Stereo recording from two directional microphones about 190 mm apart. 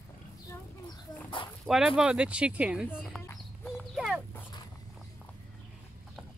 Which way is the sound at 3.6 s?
Centre (ahead or behind).